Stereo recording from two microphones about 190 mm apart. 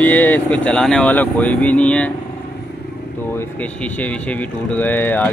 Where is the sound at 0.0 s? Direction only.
10° left (ahead or behind).